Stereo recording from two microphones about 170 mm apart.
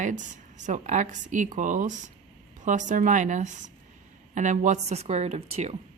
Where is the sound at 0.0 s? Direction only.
45° right (ahead or behind).